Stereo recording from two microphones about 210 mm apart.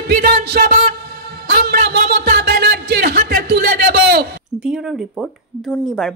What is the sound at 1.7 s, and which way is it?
Music, 50° right (ahead or behind).